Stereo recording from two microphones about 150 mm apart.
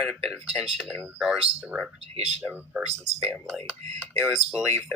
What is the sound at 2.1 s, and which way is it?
Speech, 45° right (ahead or behind).